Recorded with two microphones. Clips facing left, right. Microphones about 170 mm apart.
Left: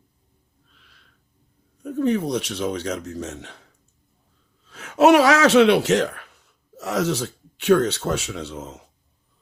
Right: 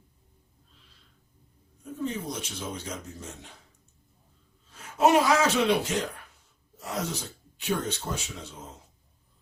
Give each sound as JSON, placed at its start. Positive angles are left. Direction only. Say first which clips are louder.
{"t": 0.7, "sound": "snort", "louder": "left 3 dB", "side_deg": 70}
{"t": 1.8, "sound": "speech", "louder": "left 11 dB", "side_deg": 70}